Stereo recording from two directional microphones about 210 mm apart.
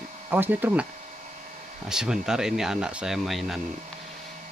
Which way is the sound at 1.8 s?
5° right (ahead or behind).